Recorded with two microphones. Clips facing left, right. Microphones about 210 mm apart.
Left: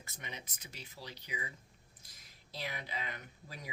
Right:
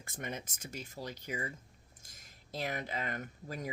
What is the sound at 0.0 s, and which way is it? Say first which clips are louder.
Speech: right 7 dB; 50° right (ahead or behind).